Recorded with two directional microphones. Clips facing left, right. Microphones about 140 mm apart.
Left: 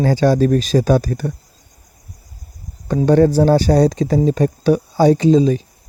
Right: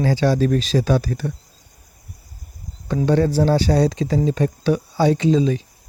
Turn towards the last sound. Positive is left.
turn(degrees=40)  # may be behind; listen again after turning